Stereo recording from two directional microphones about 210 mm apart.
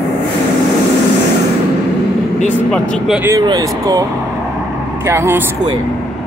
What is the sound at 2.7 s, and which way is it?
Speech, 5° left (ahead or behind).